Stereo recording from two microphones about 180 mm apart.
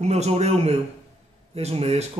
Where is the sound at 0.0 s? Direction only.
35° right (ahead or behind).